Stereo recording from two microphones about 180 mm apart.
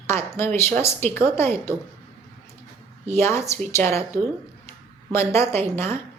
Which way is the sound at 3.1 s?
15° left (ahead or behind).